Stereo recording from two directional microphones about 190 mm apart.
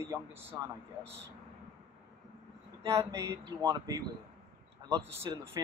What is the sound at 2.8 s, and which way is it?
Speech, 15° right (ahead or behind).